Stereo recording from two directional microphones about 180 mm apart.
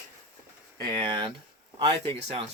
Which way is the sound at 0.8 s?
30° right (ahead or behind).